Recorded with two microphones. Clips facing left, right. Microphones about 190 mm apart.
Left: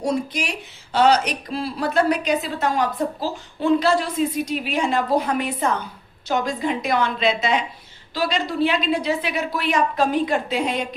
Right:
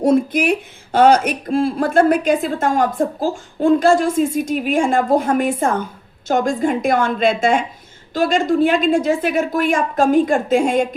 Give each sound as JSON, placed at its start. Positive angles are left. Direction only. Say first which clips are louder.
{"t": 0.0, "sound": "a woman's voice", "louder": "right 9 dB", "side_deg": -55}